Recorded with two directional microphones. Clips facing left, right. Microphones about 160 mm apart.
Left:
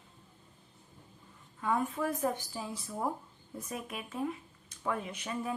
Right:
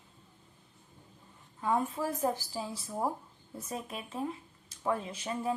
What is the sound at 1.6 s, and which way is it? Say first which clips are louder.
A woman's voice: right 1 dB; 30° right (ahead or behind).